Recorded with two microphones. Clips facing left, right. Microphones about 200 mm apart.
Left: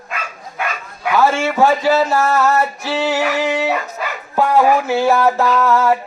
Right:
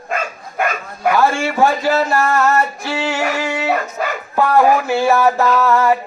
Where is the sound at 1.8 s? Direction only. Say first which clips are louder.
Left 1 dB; 5° left (ahead or behind).